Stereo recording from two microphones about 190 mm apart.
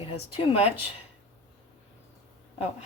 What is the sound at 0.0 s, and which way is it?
Speech, 30° left (ahead or behind).